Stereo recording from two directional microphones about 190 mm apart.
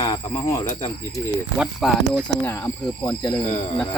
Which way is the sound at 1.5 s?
5° right (ahead or behind).